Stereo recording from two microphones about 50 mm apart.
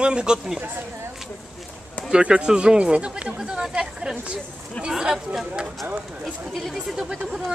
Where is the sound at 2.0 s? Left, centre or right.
Centre.